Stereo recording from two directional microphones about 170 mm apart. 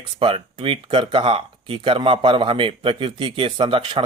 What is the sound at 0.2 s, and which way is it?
Speech, 30° right (ahead or behind).